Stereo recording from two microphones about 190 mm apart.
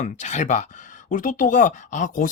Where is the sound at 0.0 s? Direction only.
40° left (ahead or behind).